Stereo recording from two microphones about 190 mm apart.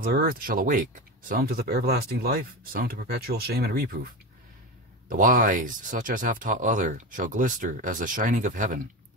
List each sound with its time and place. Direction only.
0.0 s speech: 50° right (ahead or behind)